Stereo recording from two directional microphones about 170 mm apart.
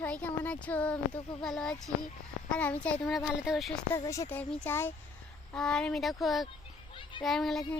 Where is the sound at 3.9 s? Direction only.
20° left (ahead or behind); by 7.6 s centre (ahead or behind).